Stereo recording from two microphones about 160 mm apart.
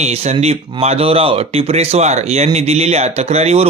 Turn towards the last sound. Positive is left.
turn(degrees=-40)  # may be behind; listen again after turning